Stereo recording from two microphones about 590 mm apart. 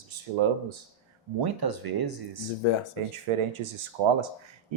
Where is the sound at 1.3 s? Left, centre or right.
Right.